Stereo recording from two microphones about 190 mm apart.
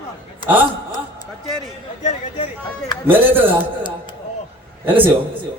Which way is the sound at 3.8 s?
25° left (ahead or behind).